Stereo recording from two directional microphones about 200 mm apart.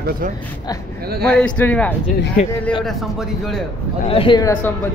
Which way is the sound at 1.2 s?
5° left (ahead or behind).